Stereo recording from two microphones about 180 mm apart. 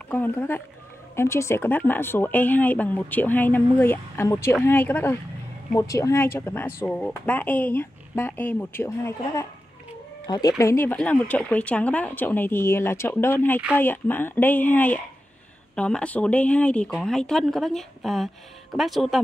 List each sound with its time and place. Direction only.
0.1 s speech: 10° left (ahead or behind)